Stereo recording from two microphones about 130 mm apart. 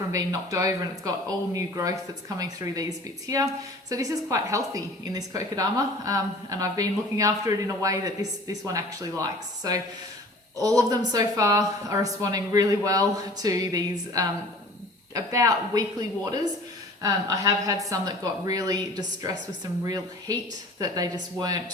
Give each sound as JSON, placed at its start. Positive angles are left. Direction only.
{"t": 0.1, "sound": "a woman's voice", "side_deg": -25}
{"t": 3.2, "sound": "a woman's voice", "side_deg": -25}